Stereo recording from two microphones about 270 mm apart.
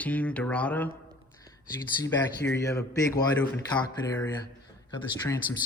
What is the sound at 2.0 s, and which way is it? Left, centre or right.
Speech, centre.